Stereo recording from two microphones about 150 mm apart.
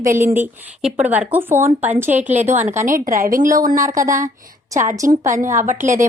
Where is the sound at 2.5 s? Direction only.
55° right (ahead or behind).